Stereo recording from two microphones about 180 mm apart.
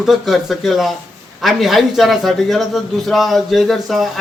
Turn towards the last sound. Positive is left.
turn(degrees=0)  # may be behind; listen again after turning